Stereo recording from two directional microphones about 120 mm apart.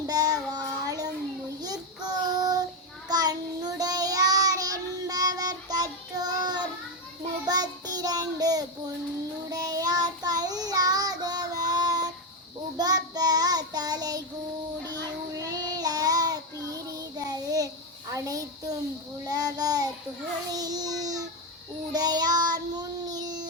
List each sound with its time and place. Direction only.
0.1 s child singing: 30° right (ahead or behind)
15.4 s child singing: 30° right (ahead or behind)